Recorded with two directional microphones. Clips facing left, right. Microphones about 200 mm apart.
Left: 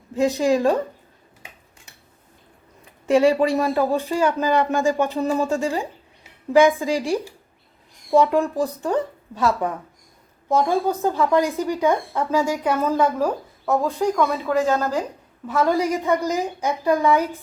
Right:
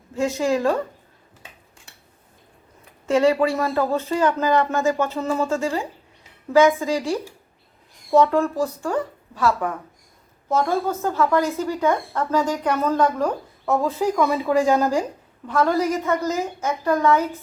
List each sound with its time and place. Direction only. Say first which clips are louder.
0.1 s speech: left 3 dB; 15° left (ahead or behind)
3.1 s speech: left 1 dB; 15° left (ahead or behind); by 15.0 s 10° right (ahead or behind)
15.4 s speech: even; 10° left (ahead or behind)